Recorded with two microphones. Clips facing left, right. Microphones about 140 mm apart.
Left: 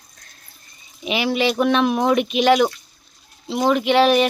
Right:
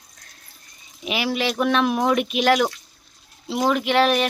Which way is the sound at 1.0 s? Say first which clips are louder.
Left 4 dB; 5° right (ahead or behind).